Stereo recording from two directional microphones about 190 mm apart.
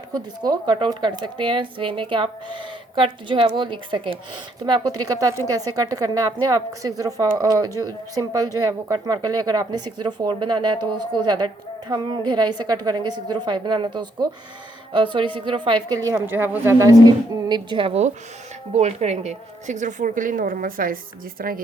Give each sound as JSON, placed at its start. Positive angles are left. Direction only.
{"t": 0.4, "sound": "a woman's voice", "side_deg": -20}
{"t": 17.5, "sound": "a woman's voice", "side_deg": -25}